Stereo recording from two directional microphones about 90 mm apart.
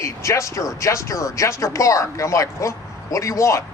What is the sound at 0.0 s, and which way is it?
A man's voice, 35° left (ahead or behind).